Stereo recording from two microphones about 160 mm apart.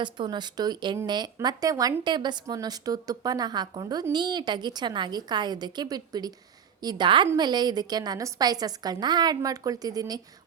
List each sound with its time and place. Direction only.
0.0 s a woman's voice: 30° right (ahead or behind)